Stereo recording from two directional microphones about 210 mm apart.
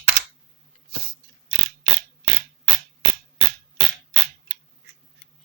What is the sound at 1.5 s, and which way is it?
Mechanisms, 55° right (ahead or behind).